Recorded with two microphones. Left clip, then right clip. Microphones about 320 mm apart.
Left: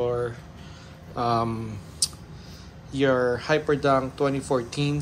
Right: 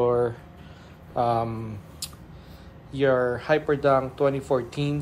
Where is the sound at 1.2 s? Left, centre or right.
Centre.